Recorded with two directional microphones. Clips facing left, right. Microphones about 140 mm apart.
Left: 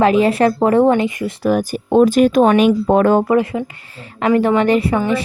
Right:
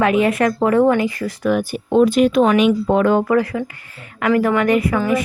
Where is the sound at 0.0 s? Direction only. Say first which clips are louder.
Left 3 dB; 30° left (ahead or behind).